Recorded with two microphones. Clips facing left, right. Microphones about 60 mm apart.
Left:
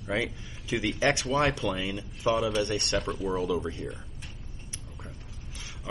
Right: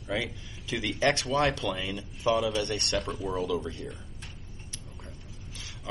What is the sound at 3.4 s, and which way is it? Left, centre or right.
Speech, centre.